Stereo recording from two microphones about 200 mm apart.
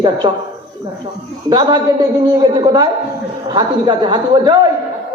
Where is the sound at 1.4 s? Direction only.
25° right (ahead or behind).